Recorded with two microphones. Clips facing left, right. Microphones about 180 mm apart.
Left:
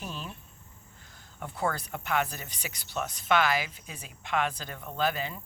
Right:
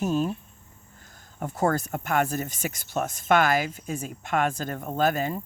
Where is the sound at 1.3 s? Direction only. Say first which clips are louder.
Right 7 dB; 45° right (ahead or behind).